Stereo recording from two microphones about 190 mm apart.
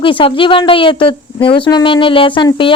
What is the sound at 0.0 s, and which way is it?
Speech, 25° left (ahead or behind).